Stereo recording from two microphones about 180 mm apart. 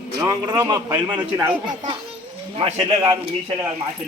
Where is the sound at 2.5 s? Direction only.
25° right (ahead or behind).